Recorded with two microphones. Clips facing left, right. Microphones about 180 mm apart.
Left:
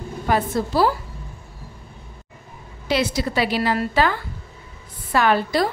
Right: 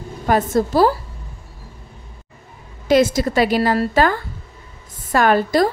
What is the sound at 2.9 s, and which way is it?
Speech, 45° right (ahead or behind).